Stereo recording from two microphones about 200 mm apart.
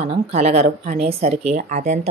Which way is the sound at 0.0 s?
30° right (ahead or behind).